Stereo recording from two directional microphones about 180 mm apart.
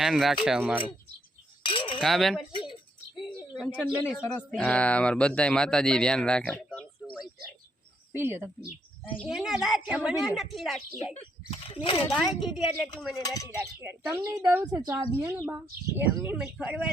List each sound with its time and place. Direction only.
0.0 s speech: centre (ahead or behind)
1.6 s a sound: 30° left (ahead or behind)
2.0 s speech: centre (ahead or behind)
2.4 s bird: 25° left (ahead or behind)
3.2 s a sound: 5° right (ahead or behind)
4.0 s speech: 5° left (ahead or behind)
7.0 s bird: centre (ahead or behind)
8.1 s speech: 10° right (ahead or behind)
11.1 s speech: 35° left (ahead or behind)
12.1 s speech: centre (ahead or behind)
13.1 s speech: 20° left (ahead or behind)
13.8 s speech: 15° right (ahead or behind)